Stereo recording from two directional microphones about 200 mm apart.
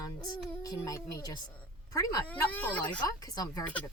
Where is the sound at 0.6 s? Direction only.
15° left (ahead or behind).